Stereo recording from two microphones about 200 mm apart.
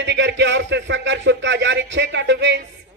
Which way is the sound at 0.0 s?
60° right (ahead or behind).